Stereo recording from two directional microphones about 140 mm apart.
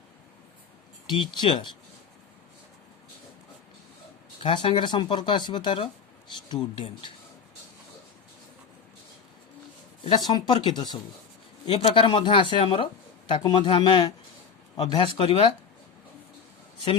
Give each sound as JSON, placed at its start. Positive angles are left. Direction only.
{"t": 1.1, "sound": "speech", "side_deg": 35}
{"t": 4.4, "sound": "speech", "side_deg": 35}
{"t": 10.0, "sound": "speech", "side_deg": 35}